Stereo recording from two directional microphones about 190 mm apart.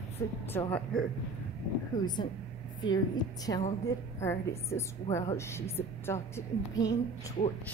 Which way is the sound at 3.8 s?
15° left (ahead or behind).